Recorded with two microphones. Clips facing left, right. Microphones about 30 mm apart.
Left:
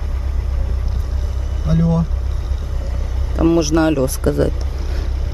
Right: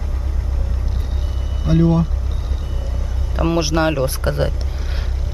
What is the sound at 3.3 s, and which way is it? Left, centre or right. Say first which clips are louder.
Speech: left 4 dB; right.